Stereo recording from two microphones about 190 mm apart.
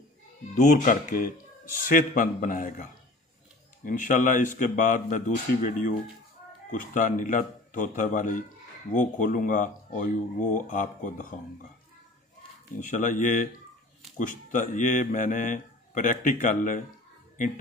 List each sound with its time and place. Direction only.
0.6 s speech: 45° left (ahead or behind)
12.7 s speech: 40° left (ahead or behind)